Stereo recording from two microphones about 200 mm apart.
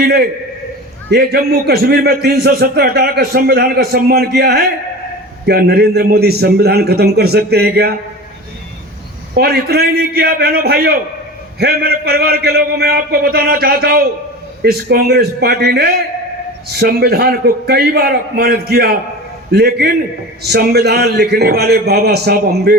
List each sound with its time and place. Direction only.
0.0 s a man's voice: 50° right (ahead or behind)
9.3 s a man's voice: 50° right (ahead or behind)